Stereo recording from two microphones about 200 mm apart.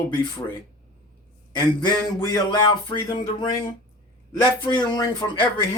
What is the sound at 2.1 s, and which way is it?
A man's voice, 20° left (ahead or behind).